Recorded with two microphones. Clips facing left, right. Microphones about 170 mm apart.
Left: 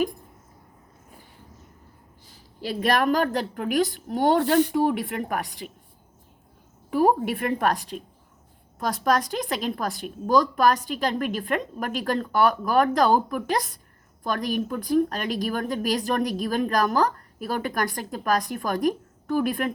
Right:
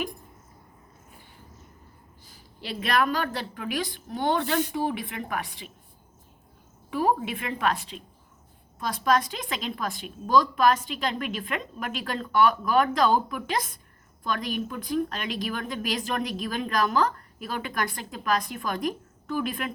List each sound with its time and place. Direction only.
2.6 s a woman's voice: 40° left (ahead or behind)
6.9 s a woman's voice: 45° left (ahead or behind)